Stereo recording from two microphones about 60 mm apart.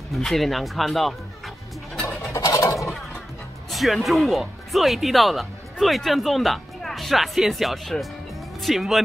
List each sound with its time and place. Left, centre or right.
0.1 s speech: centre
2.3 s a sound: left
3.7 s speech: centre